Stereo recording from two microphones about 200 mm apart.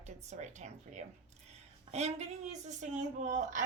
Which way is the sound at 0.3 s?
35° right (ahead or behind).